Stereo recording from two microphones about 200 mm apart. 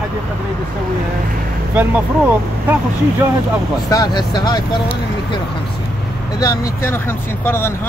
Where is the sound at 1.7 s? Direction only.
10° right (ahead or behind).